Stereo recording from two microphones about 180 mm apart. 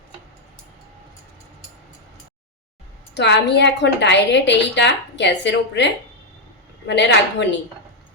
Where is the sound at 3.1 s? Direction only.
70° left (ahead or behind).